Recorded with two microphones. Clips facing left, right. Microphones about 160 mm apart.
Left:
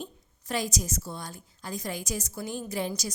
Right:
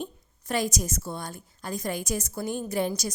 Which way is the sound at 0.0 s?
60° right (ahead or behind).